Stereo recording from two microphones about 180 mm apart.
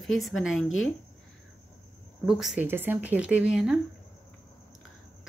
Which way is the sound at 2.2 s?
5° right (ahead or behind).